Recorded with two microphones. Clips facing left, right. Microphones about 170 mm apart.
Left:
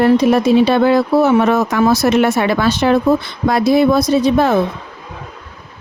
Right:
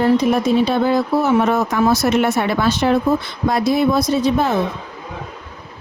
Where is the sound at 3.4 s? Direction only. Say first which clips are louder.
Left 4 dB; 75° left (ahead or behind).